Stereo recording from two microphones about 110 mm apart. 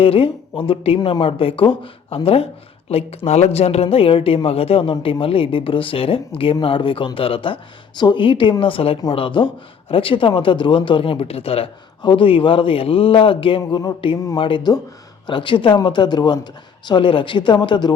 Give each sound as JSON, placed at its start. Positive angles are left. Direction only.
{"t": 0.0, "sound": "speech", "side_deg": 60}
{"t": 3.2, "sound": "speech", "side_deg": 80}
{"t": 13.7, "sound": "speech", "side_deg": 40}